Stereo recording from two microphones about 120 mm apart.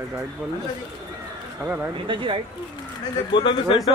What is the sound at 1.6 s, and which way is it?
Speech, 15° right (ahead or behind).